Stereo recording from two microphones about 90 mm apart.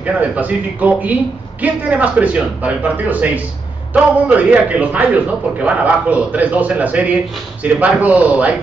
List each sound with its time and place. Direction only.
0.0 s a man's voice: 15° right (ahead or behind)